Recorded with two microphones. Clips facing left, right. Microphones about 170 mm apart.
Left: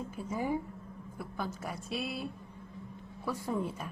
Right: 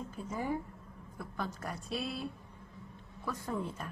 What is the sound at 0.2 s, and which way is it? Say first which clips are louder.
A woman's voice: left 2 dB; 10° left (ahead or behind).